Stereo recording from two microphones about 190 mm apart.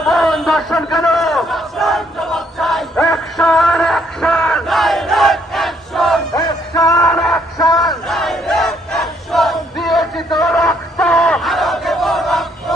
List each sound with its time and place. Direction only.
0.0 s crowd: centre (ahead or behind)
6.4 s music: 20° left (ahead or behind)
7.0 s music: centre (ahead or behind)
7.8 s crowd: centre (ahead or behind)
10.3 s battle cry: centre (ahead or behind)